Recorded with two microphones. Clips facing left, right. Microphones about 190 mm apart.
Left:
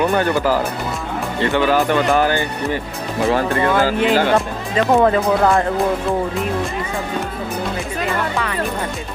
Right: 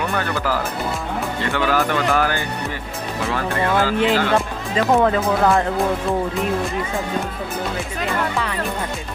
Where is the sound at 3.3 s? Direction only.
35° left (ahead or behind).